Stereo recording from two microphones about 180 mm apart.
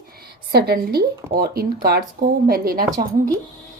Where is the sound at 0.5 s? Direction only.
60° right (ahead or behind).